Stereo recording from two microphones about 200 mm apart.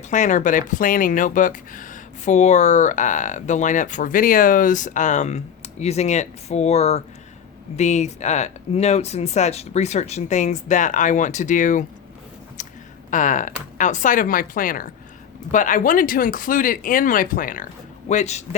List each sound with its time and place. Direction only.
0.1 s speech: 40° left (ahead or behind)
13.1 s speech: 40° left (ahead or behind)